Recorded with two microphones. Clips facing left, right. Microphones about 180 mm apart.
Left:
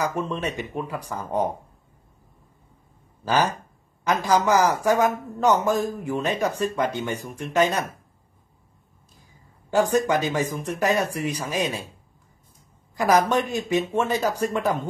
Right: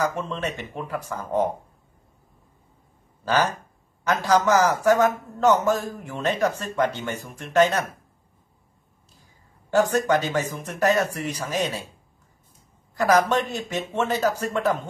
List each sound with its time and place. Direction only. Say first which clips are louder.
0.0 s a man's voice: even; 15° left (ahead or behind)
4.1 s a man's voice: even; 10° left (ahead or behind)
9.8 s a man's voice: even; 15° left (ahead or behind)
12.9 s a man's voice: even; 15° left (ahead or behind)